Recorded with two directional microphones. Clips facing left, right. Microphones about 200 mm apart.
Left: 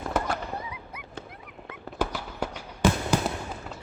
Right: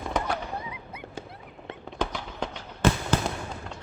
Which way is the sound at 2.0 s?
10° left (ahead or behind).